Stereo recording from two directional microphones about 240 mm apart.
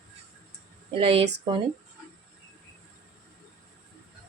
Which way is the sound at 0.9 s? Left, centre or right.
Right.